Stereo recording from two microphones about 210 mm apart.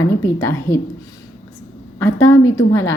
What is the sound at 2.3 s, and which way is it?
Speech, 15° left (ahead or behind).